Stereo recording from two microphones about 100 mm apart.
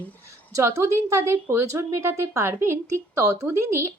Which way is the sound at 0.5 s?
30° right (ahead or behind).